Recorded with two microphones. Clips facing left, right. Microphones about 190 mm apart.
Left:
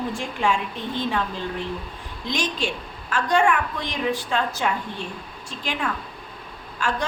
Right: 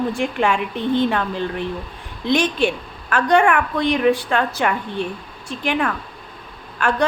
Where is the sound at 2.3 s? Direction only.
60° right (ahead or behind).